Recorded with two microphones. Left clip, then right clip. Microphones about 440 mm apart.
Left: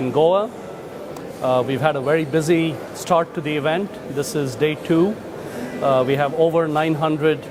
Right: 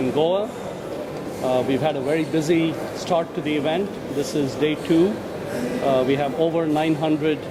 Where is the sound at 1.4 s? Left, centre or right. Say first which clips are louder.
Left 3 dB; left.